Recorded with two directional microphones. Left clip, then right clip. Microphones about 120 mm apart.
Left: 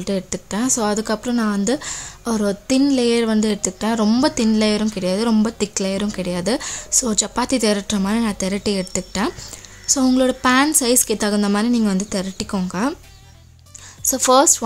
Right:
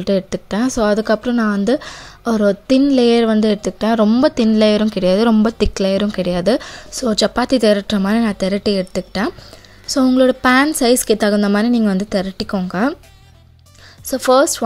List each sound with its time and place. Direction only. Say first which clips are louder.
0.0 s speech: right 6 dB; 35° right (ahead or behind)
6.6 s speech: even; 20° right (ahead or behind)
14.0 s speech: right 1 dB; 15° right (ahead or behind)